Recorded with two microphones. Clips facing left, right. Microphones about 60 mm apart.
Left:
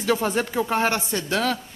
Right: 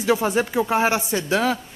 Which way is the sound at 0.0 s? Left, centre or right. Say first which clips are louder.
Right 2 dB; centre.